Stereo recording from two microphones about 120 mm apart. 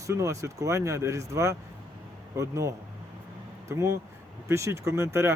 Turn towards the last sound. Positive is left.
turn(degrees=-25)  # may be behind; listen again after turning